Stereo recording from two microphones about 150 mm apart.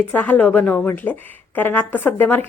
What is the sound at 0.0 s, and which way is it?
Speech, 10° left (ahead or behind).